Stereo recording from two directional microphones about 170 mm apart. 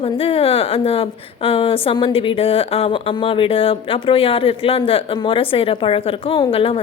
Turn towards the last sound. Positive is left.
turn(degrees=35)  # may be behind; listen again after turning